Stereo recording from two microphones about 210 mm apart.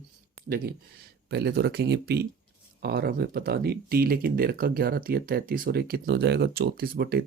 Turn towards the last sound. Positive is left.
turn(degrees=-45)  # may be behind; listen again after turning